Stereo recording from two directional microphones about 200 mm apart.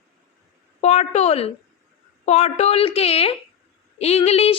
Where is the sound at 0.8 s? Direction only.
35° left (ahead or behind).